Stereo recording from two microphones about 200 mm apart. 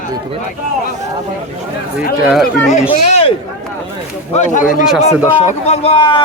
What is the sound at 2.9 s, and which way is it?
Speech, 30° left (ahead or behind).